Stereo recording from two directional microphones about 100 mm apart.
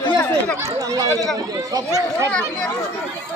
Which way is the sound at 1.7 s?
35° right (ahead or behind).